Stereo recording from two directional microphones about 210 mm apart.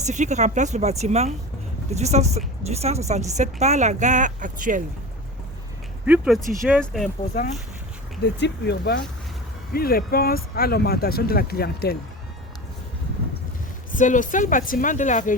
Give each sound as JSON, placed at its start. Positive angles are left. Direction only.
{"t": 0.0, "sound": "a woman's voice", "side_deg": -35}
{"t": 6.1, "sound": "speech", "side_deg": 0}
{"t": 8.2, "sound": "speech", "side_deg": 55}
{"t": 13.9, "sound": "a woman's voice", "side_deg": 40}